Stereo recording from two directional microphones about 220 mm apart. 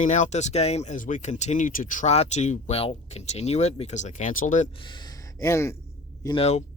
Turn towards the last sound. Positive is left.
turn(degrees=25)  # may be behind; listen again after turning